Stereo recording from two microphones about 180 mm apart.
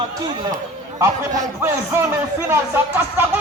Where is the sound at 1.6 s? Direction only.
10° right (ahead or behind).